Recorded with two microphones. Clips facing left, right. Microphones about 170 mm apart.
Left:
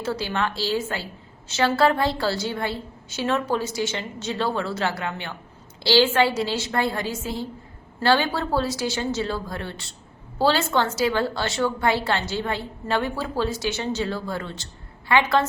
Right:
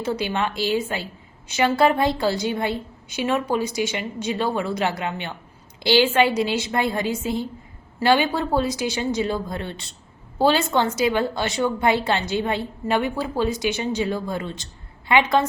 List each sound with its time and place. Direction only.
0.0 s a woman's voice: 15° right (ahead or behind)